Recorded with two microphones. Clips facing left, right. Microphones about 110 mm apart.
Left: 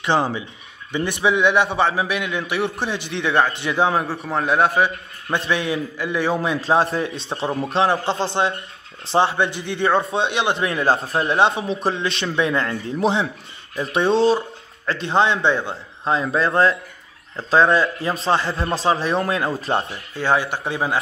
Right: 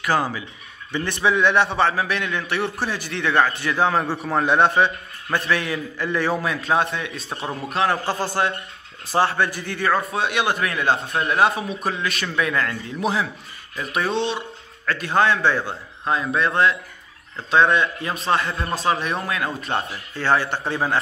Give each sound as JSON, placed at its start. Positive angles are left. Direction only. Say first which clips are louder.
{"t": 0.0, "sound": "a man's voice", "louder": "left 2 dB", "side_deg": 25}
{"t": 3.9, "sound": "a man's voice", "louder": "even", "side_deg": 0}
{"t": 5.5, "sound": "a man's voice", "louder": "left 2 dB", "side_deg": 20}
{"t": 20.2, "sound": "a man's voice", "louder": "left 1 dB", "side_deg": 15}